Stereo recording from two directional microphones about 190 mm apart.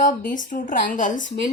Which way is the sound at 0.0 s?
45° left (ahead or behind).